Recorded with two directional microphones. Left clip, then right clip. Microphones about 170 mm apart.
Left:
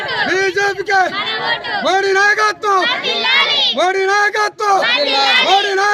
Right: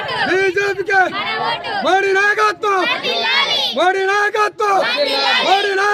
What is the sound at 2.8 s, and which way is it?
Speech, 50° right (ahead or behind).